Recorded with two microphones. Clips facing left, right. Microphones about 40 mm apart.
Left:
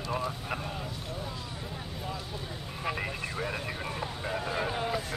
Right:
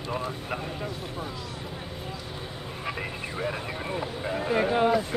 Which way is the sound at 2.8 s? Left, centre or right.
Centre.